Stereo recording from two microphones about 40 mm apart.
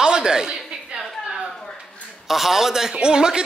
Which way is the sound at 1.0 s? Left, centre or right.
Centre.